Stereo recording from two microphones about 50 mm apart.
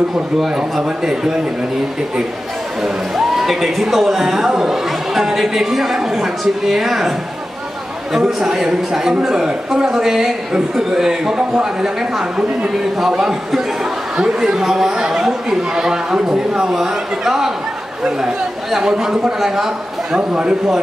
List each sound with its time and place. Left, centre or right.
0.4 s a man's voice: centre
3.3 s a man's voice: centre
20.2 s speech: centre